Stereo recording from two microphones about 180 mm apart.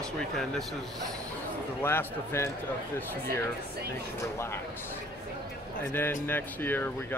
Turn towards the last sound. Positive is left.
turn(degrees=10)  # may be behind; listen again after turning